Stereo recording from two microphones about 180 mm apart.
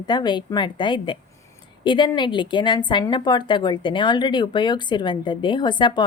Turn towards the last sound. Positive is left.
turn(degrees=25)  # may be behind; listen again after turning